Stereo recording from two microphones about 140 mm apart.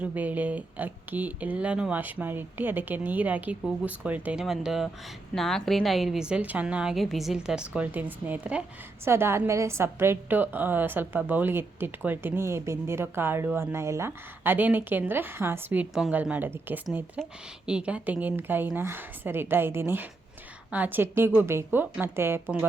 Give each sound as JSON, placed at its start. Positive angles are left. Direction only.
{"t": 0.0, "sound": "a woman's voice", "side_deg": -10}